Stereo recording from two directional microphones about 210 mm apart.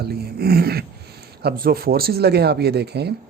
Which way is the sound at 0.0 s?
50° right (ahead or behind).